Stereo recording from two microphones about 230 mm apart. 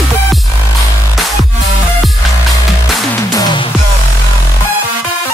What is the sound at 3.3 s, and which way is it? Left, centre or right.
Music, centre.